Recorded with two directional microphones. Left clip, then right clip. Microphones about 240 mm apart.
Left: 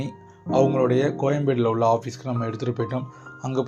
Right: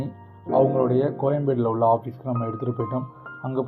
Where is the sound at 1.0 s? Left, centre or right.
Left.